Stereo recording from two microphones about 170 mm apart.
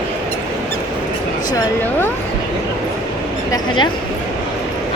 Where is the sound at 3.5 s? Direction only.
25° left (ahead or behind).